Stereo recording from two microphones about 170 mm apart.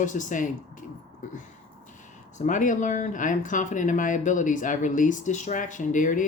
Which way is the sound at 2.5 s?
50° left (ahead or behind).